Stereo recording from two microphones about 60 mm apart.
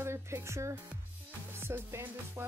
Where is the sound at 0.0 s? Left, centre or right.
Right.